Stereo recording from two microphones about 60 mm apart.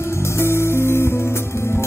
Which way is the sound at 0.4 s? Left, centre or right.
Left.